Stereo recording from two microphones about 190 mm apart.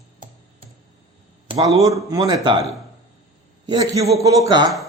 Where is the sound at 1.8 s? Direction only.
15° right (ahead or behind).